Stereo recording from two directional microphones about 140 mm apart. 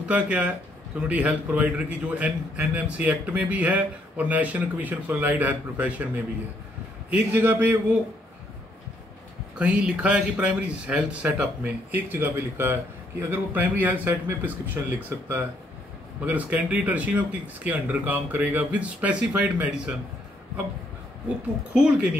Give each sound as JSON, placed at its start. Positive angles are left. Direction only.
{"t": 0.0, "sound": "a man's voice", "side_deg": -10}
{"t": 9.6, "sound": "a man's voice", "side_deg": -10}
{"t": 21.7, "sound": "a man's voice", "side_deg": -10}